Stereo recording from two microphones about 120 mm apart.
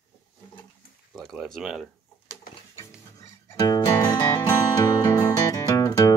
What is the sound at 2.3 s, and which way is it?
Music, 25° left (ahead or behind).